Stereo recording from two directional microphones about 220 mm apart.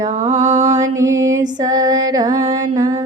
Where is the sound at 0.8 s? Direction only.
15° right (ahead or behind).